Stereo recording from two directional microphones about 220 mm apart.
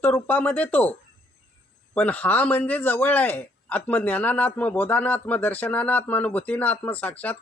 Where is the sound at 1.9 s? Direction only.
5° left (ahead or behind).